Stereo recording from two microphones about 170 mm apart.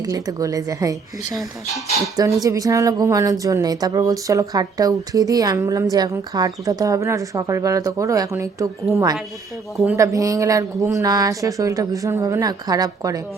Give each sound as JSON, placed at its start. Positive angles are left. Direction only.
{"t": 0.0, "sound": "a woman's voice", "side_deg": -20}
{"t": 2.1, "sound": "a woman's voice", "side_deg": -20}